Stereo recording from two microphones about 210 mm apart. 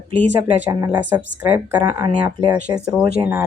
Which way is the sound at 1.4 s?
15° right (ahead or behind).